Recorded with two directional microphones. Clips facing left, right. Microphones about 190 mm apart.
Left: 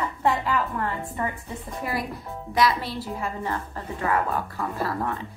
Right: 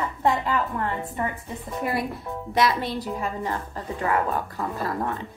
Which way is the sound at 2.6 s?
20° right (ahead or behind).